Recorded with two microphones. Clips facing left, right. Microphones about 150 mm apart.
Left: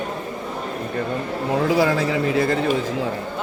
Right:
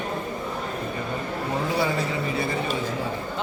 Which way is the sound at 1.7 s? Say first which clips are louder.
Left 6 dB; 90° left.